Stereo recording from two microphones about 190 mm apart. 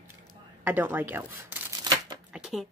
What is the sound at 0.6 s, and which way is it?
Speech, 10° right (ahead or behind).